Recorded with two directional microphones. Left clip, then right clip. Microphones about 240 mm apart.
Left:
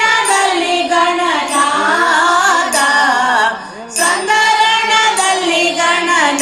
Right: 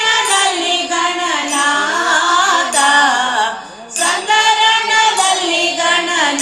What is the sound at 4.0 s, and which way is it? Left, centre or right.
Singing, left.